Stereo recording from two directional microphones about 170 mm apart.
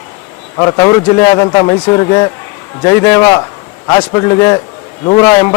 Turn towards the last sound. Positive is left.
turn(degrees=20)  # may be behind; listen again after turning